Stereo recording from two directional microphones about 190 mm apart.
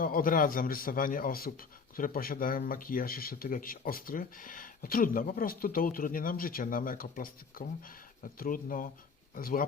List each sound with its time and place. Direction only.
0.0 s speech: 50° left (ahead or behind)